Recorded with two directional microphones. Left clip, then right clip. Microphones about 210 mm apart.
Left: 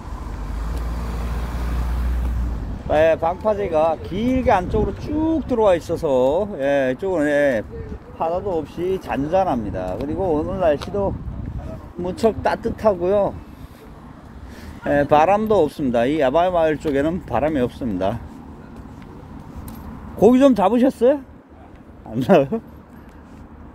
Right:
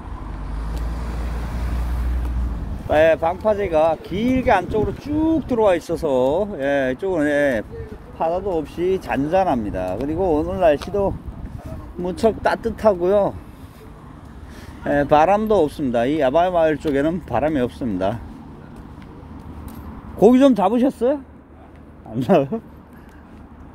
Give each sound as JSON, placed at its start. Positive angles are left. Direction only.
{"t": 0.6, "sound": "vehicle", "side_deg": 40}
{"t": 2.9, "sound": "speech", "side_deg": -20}
{"t": 12.0, "sound": "speech", "side_deg": -15}
{"t": 14.8, "sound": "speech", "side_deg": -10}
{"t": 20.2, "sound": "speech", "side_deg": -10}